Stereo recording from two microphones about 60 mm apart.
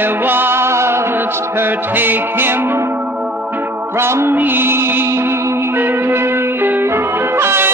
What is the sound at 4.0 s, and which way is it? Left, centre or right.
Music, right.